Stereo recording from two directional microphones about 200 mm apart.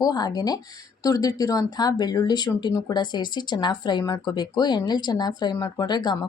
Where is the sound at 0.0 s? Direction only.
20° left (ahead or behind).